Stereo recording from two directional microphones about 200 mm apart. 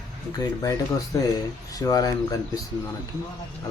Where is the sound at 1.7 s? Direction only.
20° left (ahead or behind).